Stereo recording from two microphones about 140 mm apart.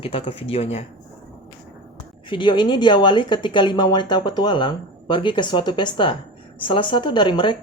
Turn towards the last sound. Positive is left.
turn(degrees=35)  # may be behind; listen again after turning